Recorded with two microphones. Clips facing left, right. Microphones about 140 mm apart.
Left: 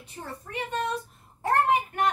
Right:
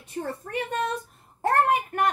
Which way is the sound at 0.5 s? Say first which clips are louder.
Even; 50° right (ahead or behind).